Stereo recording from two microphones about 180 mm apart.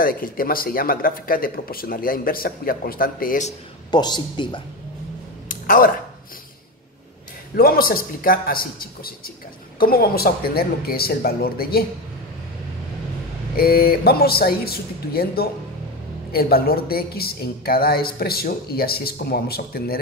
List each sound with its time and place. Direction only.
0.0 s speech: 50° left (ahead or behind)
3.9 s speech: 25° left (ahead or behind)
5.5 s a sound: 50° left (ahead or behind)
7.5 s a woman's voice: 55° left (ahead or behind)
9.8 s a woman's voice: 55° left (ahead or behind)
13.6 s a woman's voice: 55° left (ahead or behind)